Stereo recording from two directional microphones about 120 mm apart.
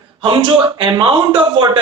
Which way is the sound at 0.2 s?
45° right (ahead or behind).